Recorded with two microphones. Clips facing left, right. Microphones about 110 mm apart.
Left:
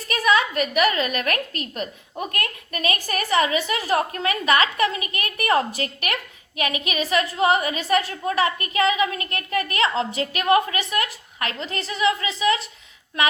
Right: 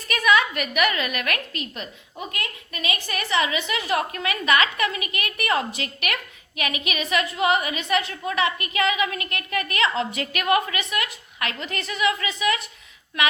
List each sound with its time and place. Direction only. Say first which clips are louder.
0.1 s a woman's voice: even; 35° left (ahead or behind)
2.1 s a woman's voice: left 4 dB; 55° left (ahead or behind); by 12.6 s 30° left (ahead or behind)